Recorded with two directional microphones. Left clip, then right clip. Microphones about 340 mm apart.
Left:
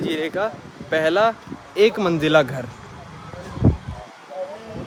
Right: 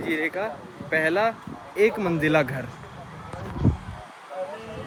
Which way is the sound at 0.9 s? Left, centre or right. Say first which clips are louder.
Left 5 dB; centre.